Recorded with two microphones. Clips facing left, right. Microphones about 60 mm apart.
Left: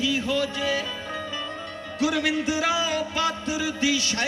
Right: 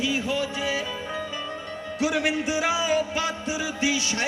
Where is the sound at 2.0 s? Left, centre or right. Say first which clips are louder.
Left 1 dB; right.